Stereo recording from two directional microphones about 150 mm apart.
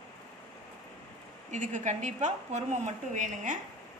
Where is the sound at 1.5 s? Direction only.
55° right (ahead or behind).